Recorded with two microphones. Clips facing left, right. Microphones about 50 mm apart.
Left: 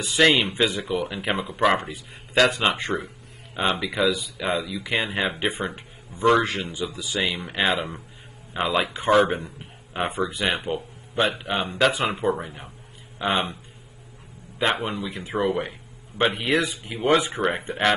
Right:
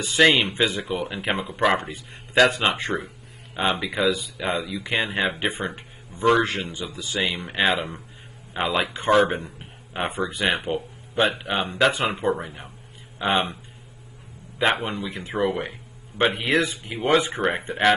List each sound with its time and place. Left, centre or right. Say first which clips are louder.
0.0 s speech: right 1 dB; centre
14.6 s a man's voice: right 1 dB; centre
15.0 s speech: even; centre
17.4 s speech: even; centre
17.6 s speech: right 4 dB; centre